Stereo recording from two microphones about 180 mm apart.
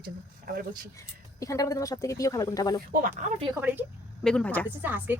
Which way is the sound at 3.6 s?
10° right (ahead or behind).